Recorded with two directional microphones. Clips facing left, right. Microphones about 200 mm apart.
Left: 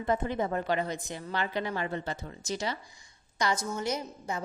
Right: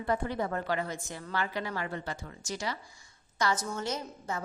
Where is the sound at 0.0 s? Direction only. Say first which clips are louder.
Left 2 dB; 20° left (ahead or behind).